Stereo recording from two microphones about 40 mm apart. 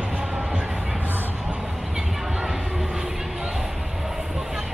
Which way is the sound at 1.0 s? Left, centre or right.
Right.